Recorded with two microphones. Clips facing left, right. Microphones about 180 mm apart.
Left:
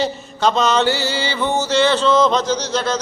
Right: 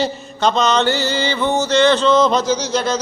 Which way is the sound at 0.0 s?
5° left (ahead or behind).